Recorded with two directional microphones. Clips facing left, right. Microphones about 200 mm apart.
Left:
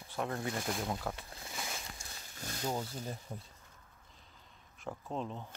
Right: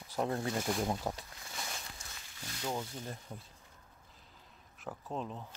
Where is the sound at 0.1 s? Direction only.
35° right (ahead or behind).